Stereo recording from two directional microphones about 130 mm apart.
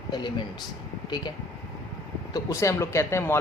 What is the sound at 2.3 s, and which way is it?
Speech, 25° left (ahead or behind).